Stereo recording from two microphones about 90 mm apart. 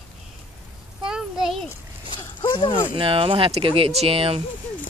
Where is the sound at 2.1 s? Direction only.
60° left (ahead or behind).